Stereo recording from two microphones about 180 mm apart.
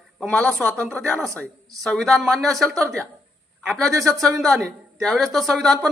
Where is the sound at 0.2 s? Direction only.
5° left (ahead or behind).